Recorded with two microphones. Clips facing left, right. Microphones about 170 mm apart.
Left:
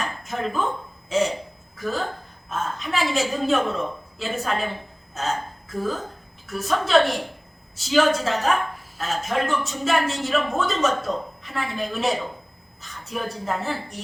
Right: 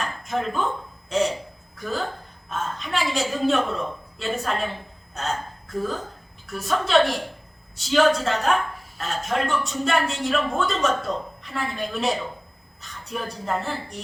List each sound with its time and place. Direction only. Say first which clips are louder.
0.2 s a man's voice: right 1 dB; centre (ahead or behind)